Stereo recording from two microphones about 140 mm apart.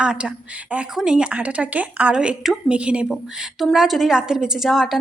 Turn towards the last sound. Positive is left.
turn(degrees=0)  # may be behind; listen again after turning